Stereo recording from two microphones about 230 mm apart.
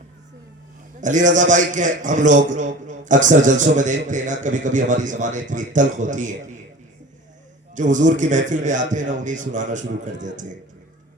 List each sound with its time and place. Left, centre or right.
1.0 s a man's voice: right
7.8 s a man's voice: right